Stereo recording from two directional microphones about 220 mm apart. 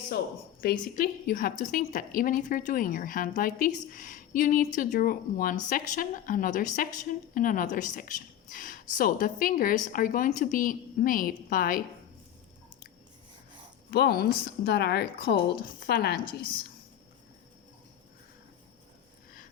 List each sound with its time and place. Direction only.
0.6 s a woman's voice: 40° left (ahead or behind)
13.9 s speech: 45° left (ahead or behind)